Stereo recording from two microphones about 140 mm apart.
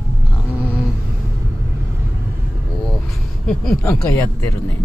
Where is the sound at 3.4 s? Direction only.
5° left (ahead or behind).